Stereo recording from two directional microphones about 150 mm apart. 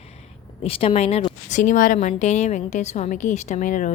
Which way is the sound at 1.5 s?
60° left (ahead or behind).